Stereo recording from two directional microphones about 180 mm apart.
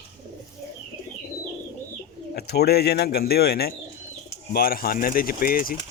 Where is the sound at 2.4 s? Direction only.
65° left (ahead or behind).